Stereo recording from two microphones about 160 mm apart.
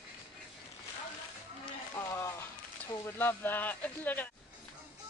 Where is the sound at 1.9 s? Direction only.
15° left (ahead or behind).